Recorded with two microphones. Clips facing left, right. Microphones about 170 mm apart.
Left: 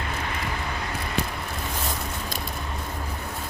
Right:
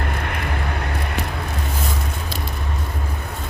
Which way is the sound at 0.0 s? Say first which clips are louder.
Right 4 dB; 60° right (ahead or behind).